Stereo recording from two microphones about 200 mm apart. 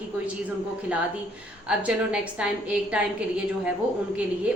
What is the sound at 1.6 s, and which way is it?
A woman's voice, 5° right (ahead or behind).